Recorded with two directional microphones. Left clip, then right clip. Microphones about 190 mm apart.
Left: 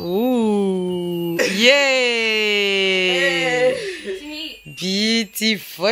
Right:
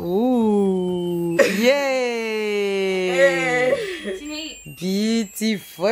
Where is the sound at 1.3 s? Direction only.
45° right (ahead or behind).